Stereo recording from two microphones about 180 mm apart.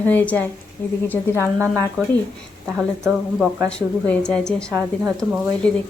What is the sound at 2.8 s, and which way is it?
Speech, 10° right (ahead or behind).